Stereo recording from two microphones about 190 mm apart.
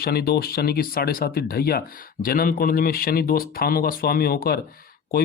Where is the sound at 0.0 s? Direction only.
55° left (ahead or behind).